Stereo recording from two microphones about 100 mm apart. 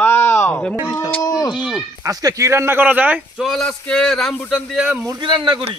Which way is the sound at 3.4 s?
Centre (ahead or behind).